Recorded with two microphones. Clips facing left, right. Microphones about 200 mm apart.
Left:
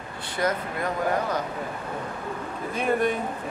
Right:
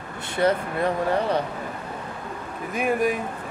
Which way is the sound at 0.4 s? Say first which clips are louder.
Right 5 dB; 30° right (ahead or behind).